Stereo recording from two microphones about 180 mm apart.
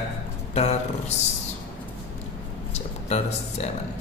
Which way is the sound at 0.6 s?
35° left (ahead or behind).